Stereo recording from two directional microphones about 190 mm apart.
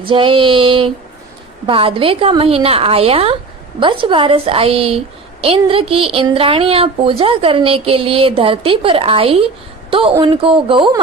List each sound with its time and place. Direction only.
0.0 s a woman's voice: 25° right (ahead or behind)